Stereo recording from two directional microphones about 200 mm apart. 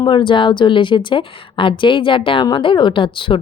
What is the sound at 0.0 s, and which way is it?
A woman's voice, 25° left (ahead or behind).